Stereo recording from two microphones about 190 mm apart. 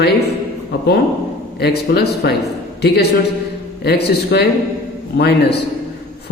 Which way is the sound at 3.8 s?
60° left (ahead or behind).